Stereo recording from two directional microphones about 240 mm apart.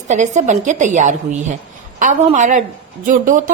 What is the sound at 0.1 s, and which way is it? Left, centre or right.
A woman's voice, right.